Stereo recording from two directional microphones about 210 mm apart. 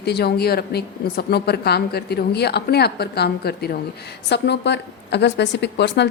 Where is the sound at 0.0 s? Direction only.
50° left (ahead or behind).